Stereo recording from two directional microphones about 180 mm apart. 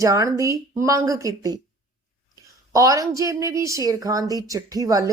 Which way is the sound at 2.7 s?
20° right (ahead or behind).